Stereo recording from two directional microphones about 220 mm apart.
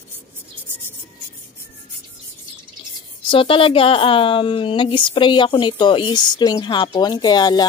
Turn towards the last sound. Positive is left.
turn(degrees=20)  # may be behind; listen again after turning